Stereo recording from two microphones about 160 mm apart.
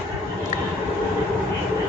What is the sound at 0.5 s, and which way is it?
Train, 50° left (ahead or behind).